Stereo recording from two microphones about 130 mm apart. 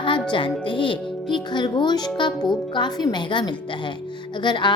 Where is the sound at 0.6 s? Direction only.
40° left (ahead or behind).